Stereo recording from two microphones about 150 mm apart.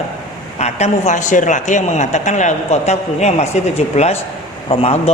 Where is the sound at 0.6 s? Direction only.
50° left (ahead or behind).